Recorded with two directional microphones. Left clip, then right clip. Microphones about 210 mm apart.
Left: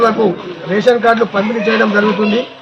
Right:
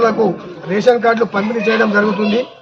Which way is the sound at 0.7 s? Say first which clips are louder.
Left 2 dB; 15° right (ahead or behind).